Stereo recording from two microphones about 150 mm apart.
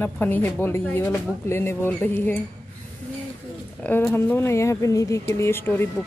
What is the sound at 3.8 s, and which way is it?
Speech, 15° left (ahead or behind).